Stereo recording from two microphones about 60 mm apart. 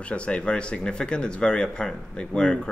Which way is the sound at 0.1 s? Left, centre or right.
Centre.